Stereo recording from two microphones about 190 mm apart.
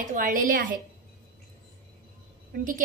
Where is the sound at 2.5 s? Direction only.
45° right (ahead or behind).